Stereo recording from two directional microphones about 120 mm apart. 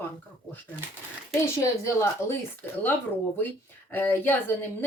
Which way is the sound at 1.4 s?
20° left (ahead or behind).